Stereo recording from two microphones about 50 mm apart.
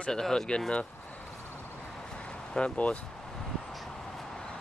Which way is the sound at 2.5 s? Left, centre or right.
Left.